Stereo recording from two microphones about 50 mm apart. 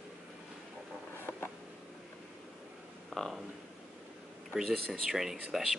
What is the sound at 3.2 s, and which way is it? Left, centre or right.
Speech, centre.